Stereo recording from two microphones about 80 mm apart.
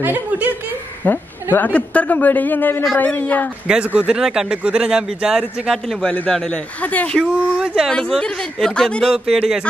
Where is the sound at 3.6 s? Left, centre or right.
Centre.